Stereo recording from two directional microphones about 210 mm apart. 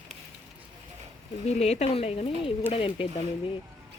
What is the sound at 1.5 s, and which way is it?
A woman's voice, 30° left (ahead or behind).